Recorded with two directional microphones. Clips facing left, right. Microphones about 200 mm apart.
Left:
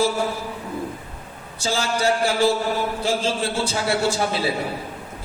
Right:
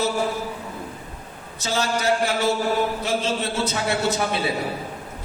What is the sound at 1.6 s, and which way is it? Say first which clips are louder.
A man's voice: left 1 dB; 30° left (ahead or behind).